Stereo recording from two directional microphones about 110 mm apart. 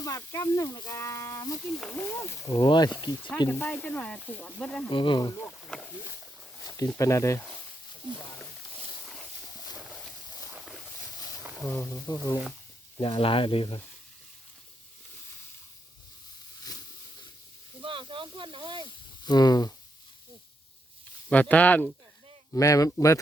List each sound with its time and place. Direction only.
0.0 s speech: 30° left (ahead or behind)
1.8 s speech: 10° left (ahead or behind)
2.5 s speech: 40° left (ahead or behind)
3.5 s speech: 15° left (ahead or behind)
4.9 s speech: 45° left (ahead or behind)
6.7 s speech: 30° left (ahead or behind)
8.1 s speech: 50° right (ahead or behind)
11.7 s speech: 20° left (ahead or behind)
13.0 s speech: 50° left (ahead or behind)
17.8 s speech: 50° right (ahead or behind)
19.2 s speech: 40° left (ahead or behind)
21.2 s speech: 10° left (ahead or behind)
22.5 s speech: 30° left (ahead or behind)